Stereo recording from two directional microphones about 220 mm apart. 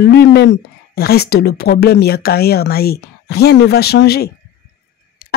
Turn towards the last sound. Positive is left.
turn(degrees=40)  # may be behind; listen again after turning